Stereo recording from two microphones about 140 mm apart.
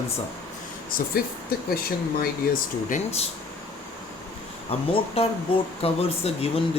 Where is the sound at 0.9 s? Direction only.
90° left.